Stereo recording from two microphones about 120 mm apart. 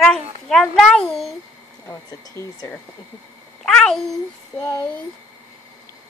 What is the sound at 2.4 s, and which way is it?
Speech, 30° right (ahead or behind).